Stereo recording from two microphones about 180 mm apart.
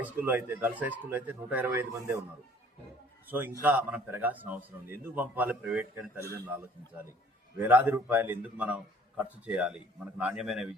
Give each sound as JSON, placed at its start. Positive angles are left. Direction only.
{"t": 0.0, "sound": "a man's voice", "side_deg": -10}
{"t": 3.2, "sound": "a man's voice", "side_deg": -10}